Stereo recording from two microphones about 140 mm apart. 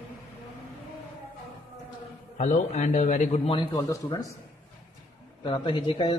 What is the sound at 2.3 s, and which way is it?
A man's voice, 55° left (ahead or behind).